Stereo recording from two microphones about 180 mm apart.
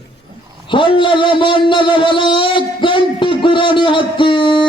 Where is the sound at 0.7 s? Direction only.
25° left (ahead or behind).